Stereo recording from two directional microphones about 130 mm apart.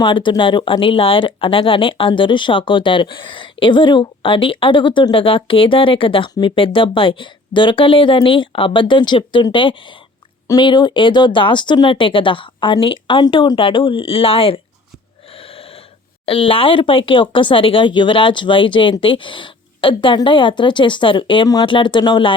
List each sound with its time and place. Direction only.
0.0 s speech: 35° left (ahead or behind)
15.4 s a sound: 45° left (ahead or behind)
16.2 s speech: 45° left (ahead or behind)